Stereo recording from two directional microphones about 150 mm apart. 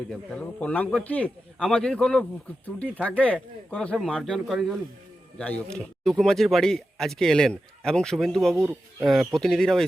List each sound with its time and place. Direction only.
0.1 s a man's voice: 10° left (ahead or behind)
8.5 s speech: 20° right (ahead or behind)
9.0 s speech: centre (ahead or behind)